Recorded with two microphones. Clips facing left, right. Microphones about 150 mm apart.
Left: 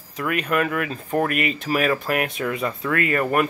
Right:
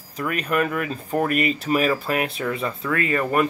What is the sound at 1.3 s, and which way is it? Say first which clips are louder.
Speech: right 2 dB; 35° right (ahead or behind).